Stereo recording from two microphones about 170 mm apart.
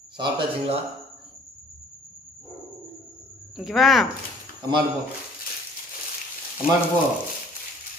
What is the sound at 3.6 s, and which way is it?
Speech, centre (ahead or behind).